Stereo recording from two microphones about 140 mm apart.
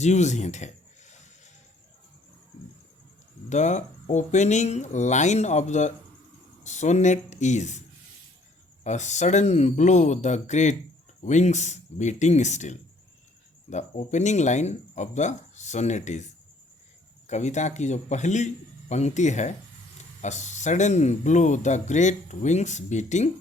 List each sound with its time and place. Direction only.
0.0 s a sound: 55° left (ahead or behind)
3.5 s speech: 55° left (ahead or behind)
8.8 s speech: 55° left (ahead or behind)